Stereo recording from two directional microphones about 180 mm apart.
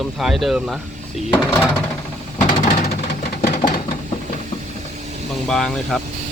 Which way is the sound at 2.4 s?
40° left (ahead or behind).